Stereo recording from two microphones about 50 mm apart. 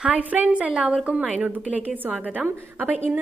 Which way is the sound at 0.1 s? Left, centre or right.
Right.